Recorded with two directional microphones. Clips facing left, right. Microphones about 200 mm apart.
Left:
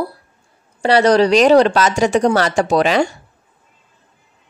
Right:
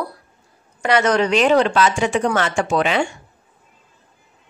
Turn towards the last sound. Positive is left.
turn(degrees=40)  # may be behind; listen again after turning